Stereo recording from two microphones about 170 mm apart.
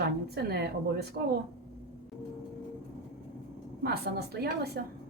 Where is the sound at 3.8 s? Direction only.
70° right (ahead or behind).